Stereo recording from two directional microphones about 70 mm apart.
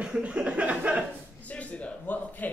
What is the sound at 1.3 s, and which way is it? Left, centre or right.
Speech, left.